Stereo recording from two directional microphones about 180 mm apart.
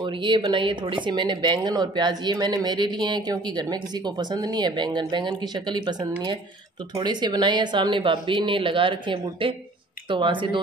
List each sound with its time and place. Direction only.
0.0 s speech: 25° right (ahead or behind)